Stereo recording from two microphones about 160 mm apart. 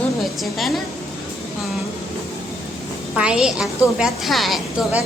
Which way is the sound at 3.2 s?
5° right (ahead or behind).